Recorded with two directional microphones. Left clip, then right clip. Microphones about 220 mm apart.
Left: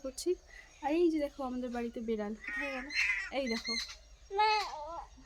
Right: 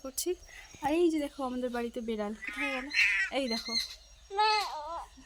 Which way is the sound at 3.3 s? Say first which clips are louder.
Right 2 dB; 30° right (ahead or behind).